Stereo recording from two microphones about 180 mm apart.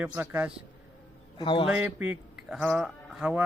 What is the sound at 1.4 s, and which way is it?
Speech, 25° left (ahead or behind).